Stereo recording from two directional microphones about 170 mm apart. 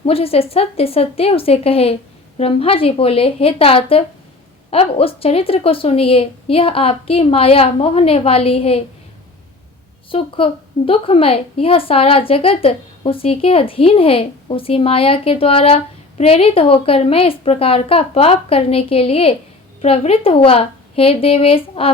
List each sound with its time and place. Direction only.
0.0 s a woman's voice: 35° left (ahead or behind)
10.1 s a woman's voice: 30° left (ahead or behind)